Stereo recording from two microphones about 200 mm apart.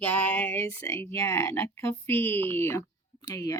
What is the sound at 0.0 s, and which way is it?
A woman's voice, 10° left (ahead or behind).